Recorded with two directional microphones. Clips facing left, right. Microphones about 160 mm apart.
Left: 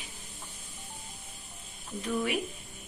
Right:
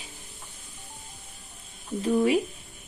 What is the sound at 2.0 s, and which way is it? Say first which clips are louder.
Speech: right 9 dB; 35° right (ahead or behind).